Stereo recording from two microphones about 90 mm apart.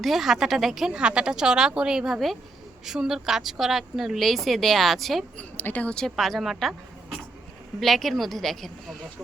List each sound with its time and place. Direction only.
0.0 s speech: centre (ahead or behind)
5.4 s speech: 20° left (ahead or behind)
6.1 s speech: centre (ahead or behind)
7.8 s speech: centre (ahead or behind)